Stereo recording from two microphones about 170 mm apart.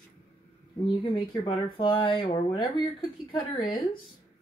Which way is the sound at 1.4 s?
30° left (ahead or behind).